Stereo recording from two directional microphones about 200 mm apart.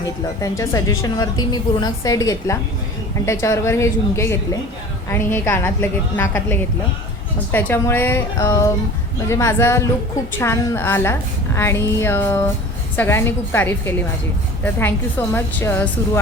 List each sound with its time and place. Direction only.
0.4 s a woman's voice: 15° left (ahead or behind)